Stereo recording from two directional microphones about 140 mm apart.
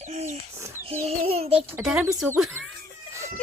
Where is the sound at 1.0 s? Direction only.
45° right (ahead or behind).